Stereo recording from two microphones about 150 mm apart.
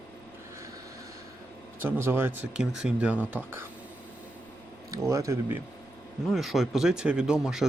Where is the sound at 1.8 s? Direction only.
15° right (ahead or behind).